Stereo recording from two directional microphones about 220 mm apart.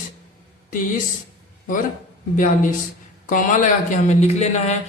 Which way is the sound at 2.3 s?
35° left (ahead or behind).